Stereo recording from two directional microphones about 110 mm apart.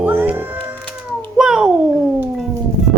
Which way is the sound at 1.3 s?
5° right (ahead or behind).